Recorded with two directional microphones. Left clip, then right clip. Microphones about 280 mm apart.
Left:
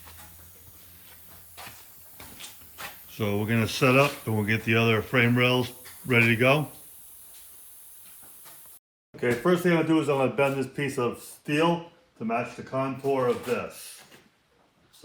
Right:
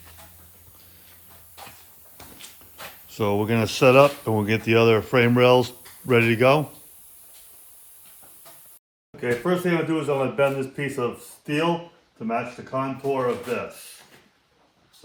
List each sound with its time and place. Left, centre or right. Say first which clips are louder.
2.7 s speech: right 5 dB; centre
9.2 s speech: even; centre